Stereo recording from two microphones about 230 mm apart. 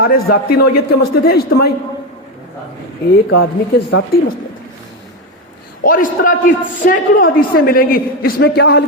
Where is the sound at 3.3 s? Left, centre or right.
Left.